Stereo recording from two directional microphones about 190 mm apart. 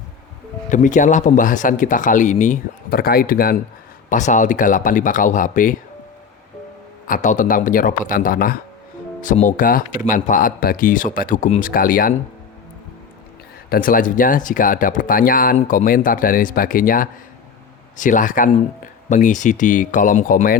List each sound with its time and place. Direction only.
0.7 s speech: 40° left (ahead or behind)
7.1 s speech: 40° left (ahead or behind)
13.7 s speech: 50° left (ahead or behind)